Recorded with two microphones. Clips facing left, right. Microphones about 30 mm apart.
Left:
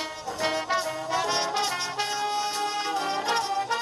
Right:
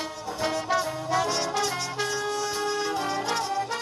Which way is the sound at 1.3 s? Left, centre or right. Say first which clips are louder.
Even; left.